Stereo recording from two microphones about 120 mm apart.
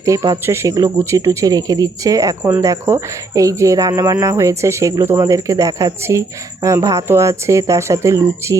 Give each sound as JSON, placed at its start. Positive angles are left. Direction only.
{"t": 0.0, "sound": "speech", "side_deg": -30}